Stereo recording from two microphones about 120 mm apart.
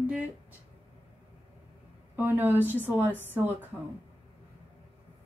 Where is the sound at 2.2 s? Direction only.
15° right (ahead or behind).